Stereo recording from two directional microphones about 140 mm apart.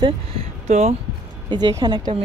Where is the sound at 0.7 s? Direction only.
55° right (ahead or behind).